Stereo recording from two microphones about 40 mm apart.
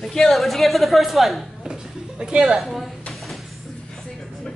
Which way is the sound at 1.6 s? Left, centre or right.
Centre.